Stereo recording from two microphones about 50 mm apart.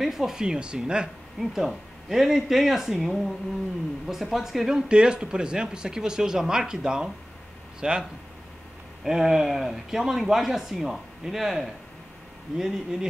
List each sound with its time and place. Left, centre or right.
0.0 s speech: centre
1.4 s speech: centre
9.0 s speech: centre